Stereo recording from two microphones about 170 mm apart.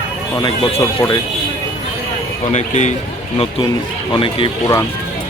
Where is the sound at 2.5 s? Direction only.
45° left (ahead or behind).